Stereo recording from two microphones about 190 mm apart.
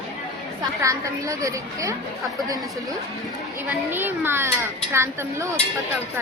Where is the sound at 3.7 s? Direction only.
10° right (ahead or behind).